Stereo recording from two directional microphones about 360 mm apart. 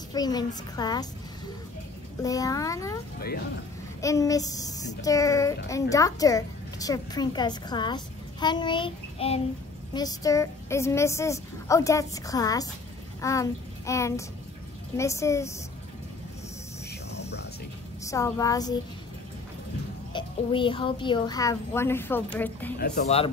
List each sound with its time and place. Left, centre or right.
0.1 s a woman's voice: centre
2.2 s a woman's voice: centre
3.2 s speech: left
4.0 s a woman's voice: centre
17.2 s a sound: left
18.0 s a woman's voice: centre
20.1 s a woman's voice: centre
22.8 s speech: left